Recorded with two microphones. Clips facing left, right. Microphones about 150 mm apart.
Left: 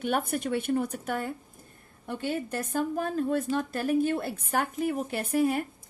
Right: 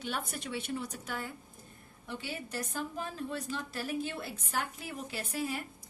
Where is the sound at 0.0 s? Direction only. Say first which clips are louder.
Left 10 dB; 55° left (ahead or behind).